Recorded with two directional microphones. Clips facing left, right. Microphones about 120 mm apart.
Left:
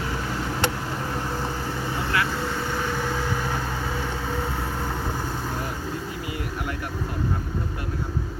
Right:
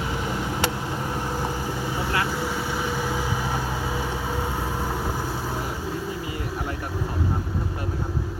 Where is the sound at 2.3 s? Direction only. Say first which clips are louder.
Even; 10° right (ahead or behind).